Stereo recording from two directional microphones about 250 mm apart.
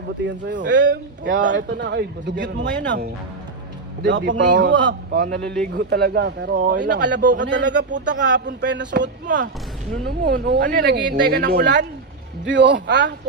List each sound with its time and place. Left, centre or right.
0.3 s speech: right
4.4 s speech: right
8.1 s speech: right
8.4 s speech: right